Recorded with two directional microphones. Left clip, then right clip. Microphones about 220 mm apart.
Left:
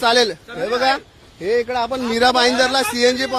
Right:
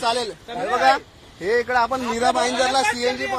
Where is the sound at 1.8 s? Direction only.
30° left (ahead or behind); by 3.4 s 45° left (ahead or behind).